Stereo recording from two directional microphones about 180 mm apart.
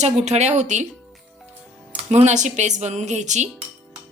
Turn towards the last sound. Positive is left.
turn(degrees=-40)  # may be behind; listen again after turning